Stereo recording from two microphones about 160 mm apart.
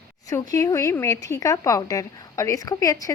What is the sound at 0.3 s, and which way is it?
Speech, 20° left (ahead or behind).